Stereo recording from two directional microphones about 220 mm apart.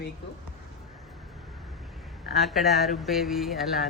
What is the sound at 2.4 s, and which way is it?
Speech, centre (ahead or behind).